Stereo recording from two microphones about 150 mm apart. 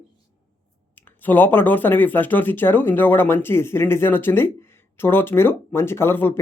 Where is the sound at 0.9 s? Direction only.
10° left (ahead or behind).